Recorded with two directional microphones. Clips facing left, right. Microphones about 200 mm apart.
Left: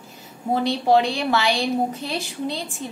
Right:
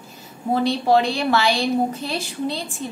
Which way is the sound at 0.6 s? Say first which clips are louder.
Even; 15° left (ahead or behind).